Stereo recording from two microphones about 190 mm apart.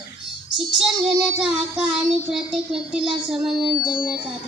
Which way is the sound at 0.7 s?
Centre (ahead or behind).